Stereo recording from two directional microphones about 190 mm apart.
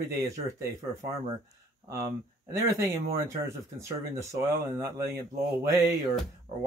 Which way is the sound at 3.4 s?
15° right (ahead or behind).